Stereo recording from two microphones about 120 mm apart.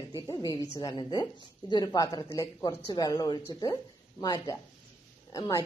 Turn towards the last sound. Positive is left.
turn(degrees=30)  # may be behind; listen again after turning